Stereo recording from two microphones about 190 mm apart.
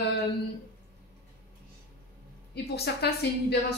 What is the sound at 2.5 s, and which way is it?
A woman's voice, 60° left (ahead or behind).